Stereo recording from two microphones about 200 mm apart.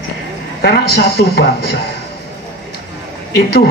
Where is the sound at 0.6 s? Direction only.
55° left (ahead or behind).